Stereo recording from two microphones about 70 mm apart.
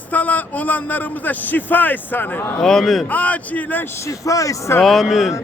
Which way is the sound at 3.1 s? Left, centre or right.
Left.